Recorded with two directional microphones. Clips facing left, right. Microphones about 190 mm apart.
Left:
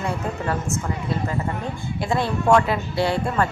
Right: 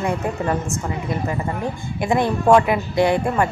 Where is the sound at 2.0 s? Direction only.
20° right (ahead or behind).